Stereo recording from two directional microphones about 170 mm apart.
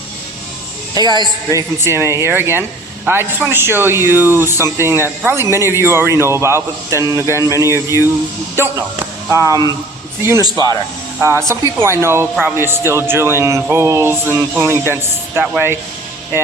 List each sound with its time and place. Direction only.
0.9 s speech: 25° right (ahead or behind)